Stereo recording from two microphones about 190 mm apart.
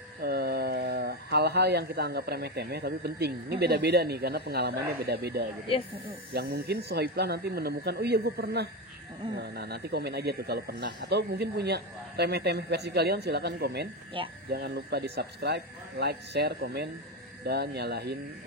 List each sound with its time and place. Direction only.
0.2 s speech: 55° right (ahead or behind)
14.2 s speech: 25° right (ahead or behind)
14.5 s speech: 60° right (ahead or behind)